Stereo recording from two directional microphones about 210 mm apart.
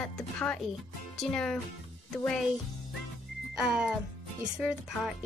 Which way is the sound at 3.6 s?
5° right (ahead or behind).